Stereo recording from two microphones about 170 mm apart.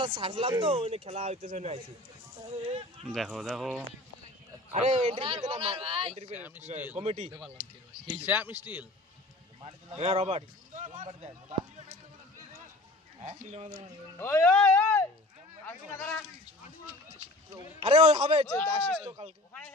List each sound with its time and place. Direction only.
0.0 s speech: 35° right (ahead or behind)
3.1 s speech: centre (ahead or behind)
4.7 s speech: 40° right (ahead or behind)
8.3 s a man's voice: 10° right (ahead or behind)
10.0 s speech: 35° right (ahead or behind)
13.2 s speech: 45° right (ahead or behind)
14.2 s speech: 15° left (ahead or behind)
17.8 s speech: 35° right (ahead or behind)
18.5 s speech: 5° left (ahead or behind)